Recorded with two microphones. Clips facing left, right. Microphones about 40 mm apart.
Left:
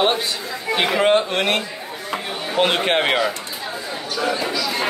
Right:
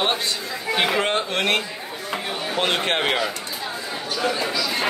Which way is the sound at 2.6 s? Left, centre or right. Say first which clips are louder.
Left 4 dB; centre.